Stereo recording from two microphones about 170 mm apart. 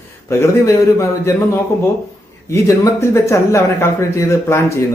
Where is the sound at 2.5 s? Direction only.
15° left (ahead or behind).